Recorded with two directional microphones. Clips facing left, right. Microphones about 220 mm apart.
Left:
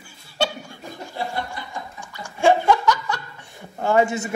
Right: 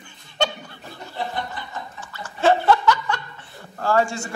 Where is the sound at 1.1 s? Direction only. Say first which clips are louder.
Even; 10° left (ahead or behind).